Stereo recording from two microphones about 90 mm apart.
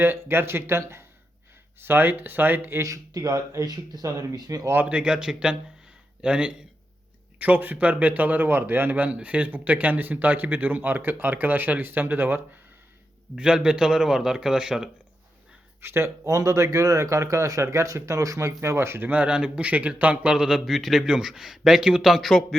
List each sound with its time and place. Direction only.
0.0 s speech: 25° right (ahead or behind)
2.8 s speech: 40° right (ahead or behind)
4.0 s speech: 30° right (ahead or behind)
4.7 s speech: 20° right (ahead or behind)
13.3 s speech: 10° right (ahead or behind)
15.8 s speech: 30° right (ahead or behind)
19.0 s speech: 15° right (ahead or behind); by 22.5 s centre (ahead or behind)